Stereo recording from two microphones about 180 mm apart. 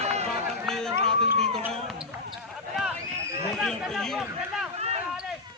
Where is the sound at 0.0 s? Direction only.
35° right (ahead or behind).